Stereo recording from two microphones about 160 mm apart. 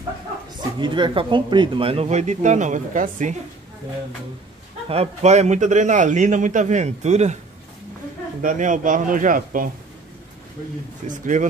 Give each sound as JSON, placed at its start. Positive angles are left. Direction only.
{"t": 0.6, "sound": "speech", "side_deg": -30}
{"t": 4.8, "sound": "a man's voice", "side_deg": -40}
{"t": 8.4, "sound": "speech", "side_deg": -55}
{"t": 11.1, "sound": "a man's voice", "side_deg": -55}